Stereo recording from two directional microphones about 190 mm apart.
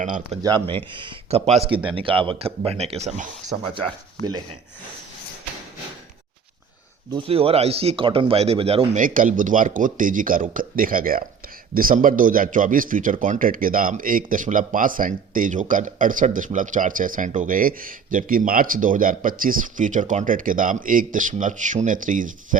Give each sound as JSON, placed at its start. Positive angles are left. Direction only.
{"t": 0.0, "sound": "speech", "side_deg": -40}
{"t": 0.4, "sound": "speech", "side_deg": -25}
{"t": 7.1, "sound": "speech", "side_deg": -30}
{"t": 9.0, "sound": "speech", "side_deg": -45}